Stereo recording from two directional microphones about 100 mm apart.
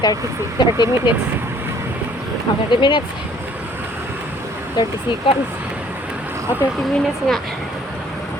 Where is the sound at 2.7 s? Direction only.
50° left (ahead or behind).